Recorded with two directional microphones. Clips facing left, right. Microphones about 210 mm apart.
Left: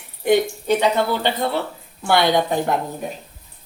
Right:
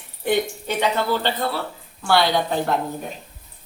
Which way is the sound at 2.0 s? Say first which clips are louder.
Left 2 dB; 20° left (ahead or behind).